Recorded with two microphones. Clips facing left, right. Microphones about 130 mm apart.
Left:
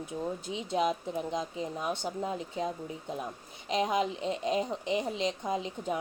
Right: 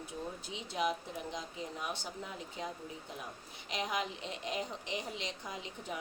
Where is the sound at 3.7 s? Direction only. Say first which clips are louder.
Left 8 dB; 25° left (ahead or behind).